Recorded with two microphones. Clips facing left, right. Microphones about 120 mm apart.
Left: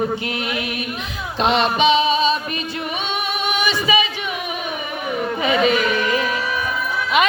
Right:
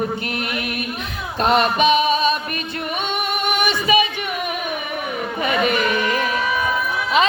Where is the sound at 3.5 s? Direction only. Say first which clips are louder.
Right 1 dB; 55° right (ahead or behind).